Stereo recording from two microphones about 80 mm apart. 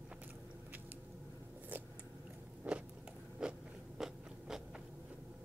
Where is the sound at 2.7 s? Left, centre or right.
Centre.